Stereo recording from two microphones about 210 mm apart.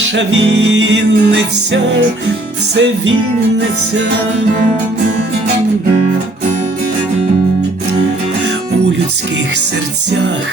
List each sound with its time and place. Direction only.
0.2 s music: 55° right (ahead or behind)